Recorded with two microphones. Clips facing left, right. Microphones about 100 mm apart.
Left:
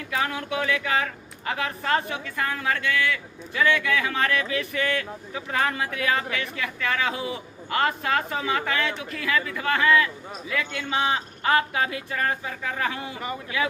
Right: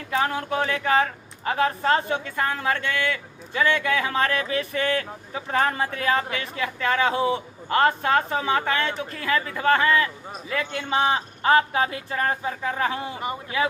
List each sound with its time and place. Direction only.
0.1 s speech: 35° right (ahead or behind)